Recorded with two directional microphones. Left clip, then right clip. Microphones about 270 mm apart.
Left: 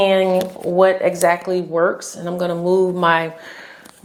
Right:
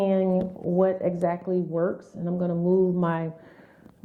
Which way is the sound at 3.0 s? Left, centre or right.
Centre.